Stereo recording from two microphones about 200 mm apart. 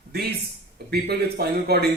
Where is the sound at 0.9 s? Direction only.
55° right (ahead or behind).